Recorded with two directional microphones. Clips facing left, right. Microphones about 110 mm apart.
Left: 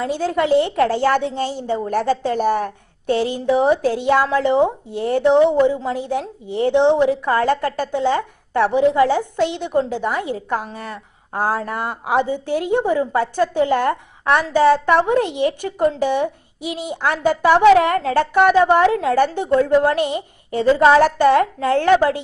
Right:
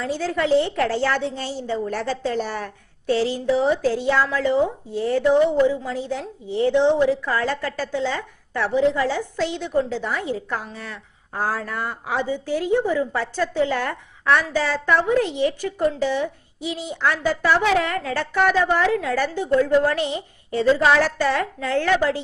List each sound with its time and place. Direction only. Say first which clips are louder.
0.0 s a woman's voice: left 4 dB; 50° left (ahead or behind)
4.4 s a woman's voice: left 4 dB; 65° left (ahead or behind)
13.0 s a woman's voice: left 5 dB; 45° left (ahead or behind)